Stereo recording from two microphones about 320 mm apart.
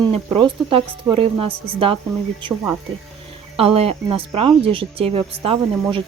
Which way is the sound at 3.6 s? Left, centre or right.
Centre.